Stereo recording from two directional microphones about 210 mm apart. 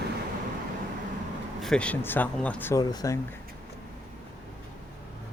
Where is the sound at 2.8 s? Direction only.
20° left (ahead or behind).